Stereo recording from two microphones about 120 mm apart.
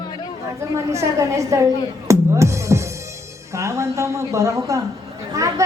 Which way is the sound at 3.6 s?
25° right (ahead or behind).